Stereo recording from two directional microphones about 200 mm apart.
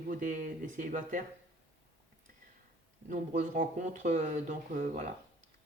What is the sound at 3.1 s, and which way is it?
Speech, 40° right (ahead or behind).